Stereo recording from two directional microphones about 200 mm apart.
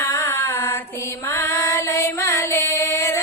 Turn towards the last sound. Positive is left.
turn(degrees=15)  # may be behind; listen again after turning